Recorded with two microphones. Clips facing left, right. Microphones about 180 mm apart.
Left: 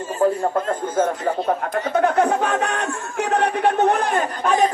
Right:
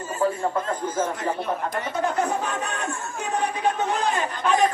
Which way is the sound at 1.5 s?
65° left (ahead or behind).